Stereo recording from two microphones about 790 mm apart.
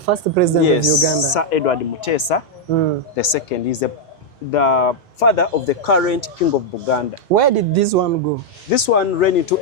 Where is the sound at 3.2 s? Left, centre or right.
Left.